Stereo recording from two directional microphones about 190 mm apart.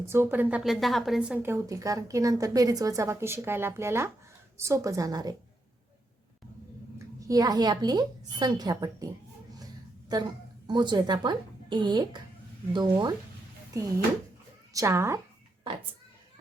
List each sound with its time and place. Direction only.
0.1 s a woman's voice: 10° right (ahead or behind)
7.3 s a woman's voice: 20° right (ahead or behind)
10.1 s a woman's voice: 20° right (ahead or behind)
14.7 s a woman's voice: 15° right (ahead or behind)